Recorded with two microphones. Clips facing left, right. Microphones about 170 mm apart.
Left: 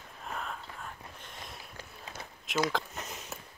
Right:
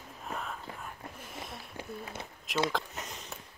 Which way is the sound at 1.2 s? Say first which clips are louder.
Right 5 dB; 5° right (ahead or behind).